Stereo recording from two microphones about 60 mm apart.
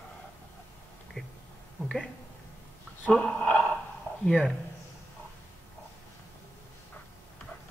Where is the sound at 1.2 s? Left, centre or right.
Centre.